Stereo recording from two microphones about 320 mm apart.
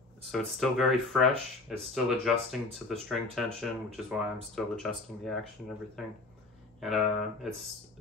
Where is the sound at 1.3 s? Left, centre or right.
Centre.